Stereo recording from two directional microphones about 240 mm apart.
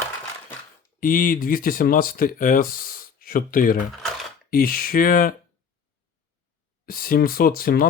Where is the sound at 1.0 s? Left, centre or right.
Left.